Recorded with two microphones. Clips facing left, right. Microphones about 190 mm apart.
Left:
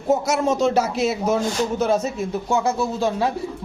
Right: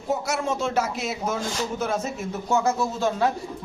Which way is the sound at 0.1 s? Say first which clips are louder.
Left 6 dB; 40° left (ahead or behind).